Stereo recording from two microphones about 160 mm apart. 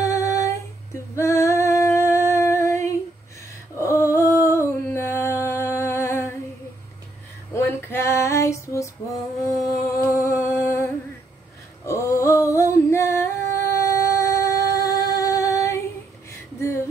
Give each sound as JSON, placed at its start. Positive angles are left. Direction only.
{"t": 0.0, "sound": "female singing", "side_deg": 20}
{"t": 1.1, "sound": "humming", "side_deg": 20}
{"t": 7.5, "sound": "female singing", "side_deg": 15}
{"t": 9.9, "sound": "music", "side_deg": 20}
{"t": 11.8, "sound": "singing", "side_deg": 15}
{"t": 16.5, "sound": "a sound", "side_deg": 15}